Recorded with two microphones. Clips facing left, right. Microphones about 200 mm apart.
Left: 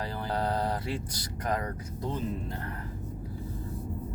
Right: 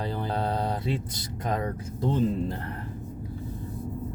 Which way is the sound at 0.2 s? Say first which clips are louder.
Left 1 dB; 20° right (ahead or behind).